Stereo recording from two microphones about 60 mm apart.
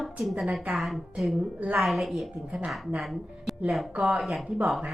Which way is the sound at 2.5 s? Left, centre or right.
Centre.